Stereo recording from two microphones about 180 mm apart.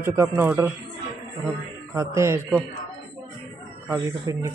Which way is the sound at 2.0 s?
15° right (ahead or behind).